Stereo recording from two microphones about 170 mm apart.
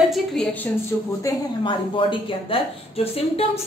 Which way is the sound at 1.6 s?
30° left (ahead or behind).